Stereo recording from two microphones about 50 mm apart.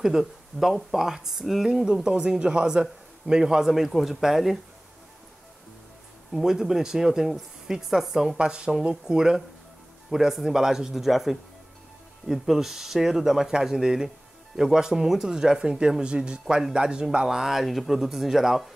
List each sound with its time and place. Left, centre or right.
0.0 s a man's voice: centre
6.3 s a man's voice: centre
8.4 s a man's voice: centre